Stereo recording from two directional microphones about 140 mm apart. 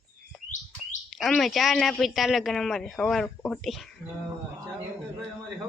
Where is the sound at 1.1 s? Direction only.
Centre (ahead or behind).